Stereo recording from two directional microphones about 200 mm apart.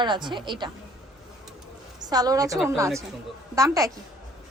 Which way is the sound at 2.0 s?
20° right (ahead or behind).